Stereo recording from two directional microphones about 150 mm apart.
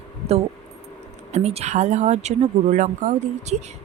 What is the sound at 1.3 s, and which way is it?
Speech, 45° right (ahead or behind).